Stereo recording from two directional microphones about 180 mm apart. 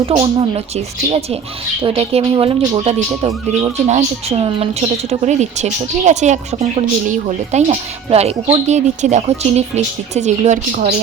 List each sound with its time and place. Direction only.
0.2 s speech: 30° right (ahead or behind)
1.8 s speech: 30° right (ahead or behind)